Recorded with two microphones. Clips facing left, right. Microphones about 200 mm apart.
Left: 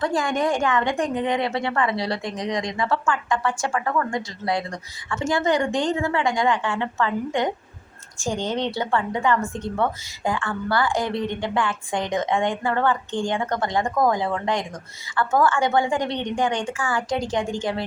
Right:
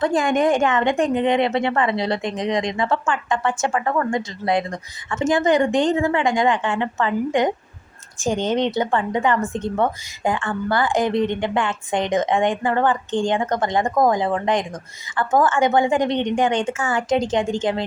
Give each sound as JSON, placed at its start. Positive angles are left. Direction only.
{"t": 0.0, "sound": "a woman's voice", "side_deg": -20}